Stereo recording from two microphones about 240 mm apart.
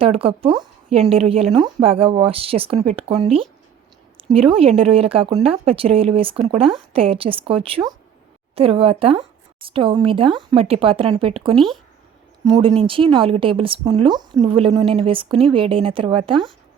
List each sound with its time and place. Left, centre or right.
0.0 s a woman's voice: right
11.5 s speech: centre
12.5 s a woman's voice: centre